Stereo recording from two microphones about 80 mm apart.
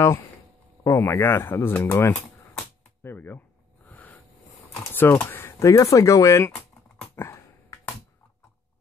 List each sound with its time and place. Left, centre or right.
0.8 s speech: left
1.9 s speech: left
3.0 s a sound: left
4.9 s speech: left
5.6 s speech: left
7.2 s a sound: left